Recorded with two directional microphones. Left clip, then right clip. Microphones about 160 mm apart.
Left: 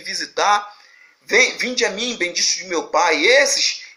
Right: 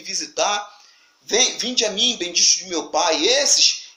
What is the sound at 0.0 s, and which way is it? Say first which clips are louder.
A man's voice: left 3 dB; 25° right (ahead or behind).